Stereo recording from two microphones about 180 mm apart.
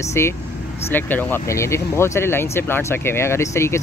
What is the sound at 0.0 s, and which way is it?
Speech, 15° left (ahead or behind).